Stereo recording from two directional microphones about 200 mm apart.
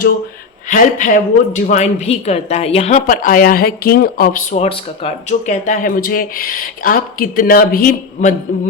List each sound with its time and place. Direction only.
0.7 s speech: 40° left (ahead or behind)